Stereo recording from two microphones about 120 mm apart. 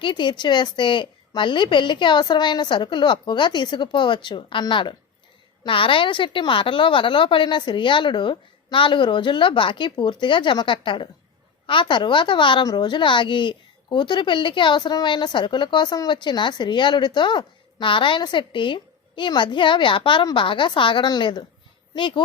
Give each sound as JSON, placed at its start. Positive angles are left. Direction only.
{"t": 0.0, "sound": "a woman's voice", "side_deg": 40}